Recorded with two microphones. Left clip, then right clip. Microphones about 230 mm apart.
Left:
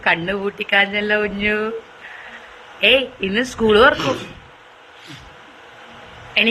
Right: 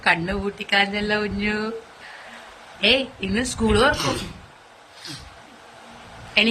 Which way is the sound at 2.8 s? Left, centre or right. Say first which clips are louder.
Left 5 dB; centre.